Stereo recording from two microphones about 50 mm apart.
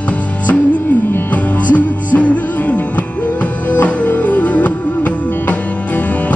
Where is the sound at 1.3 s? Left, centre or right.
Left.